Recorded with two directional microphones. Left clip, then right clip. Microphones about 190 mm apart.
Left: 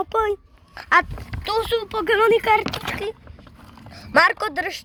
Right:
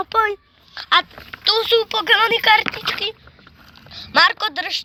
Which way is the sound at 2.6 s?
20° left (ahead or behind).